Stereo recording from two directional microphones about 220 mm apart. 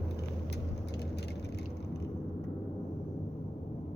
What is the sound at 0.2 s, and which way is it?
Vehicle, 50° left (ahead or behind).